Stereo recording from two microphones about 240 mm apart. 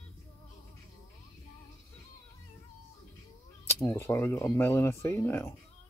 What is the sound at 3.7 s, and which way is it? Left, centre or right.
Speech, centre.